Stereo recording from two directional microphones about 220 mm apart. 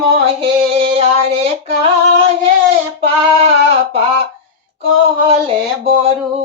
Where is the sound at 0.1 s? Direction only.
25° right (ahead or behind).